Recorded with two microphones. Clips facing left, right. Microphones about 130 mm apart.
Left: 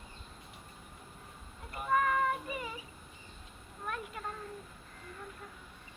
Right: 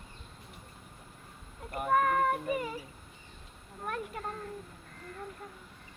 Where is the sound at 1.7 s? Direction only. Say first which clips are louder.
Right 3 dB; 50° right (ahead or behind).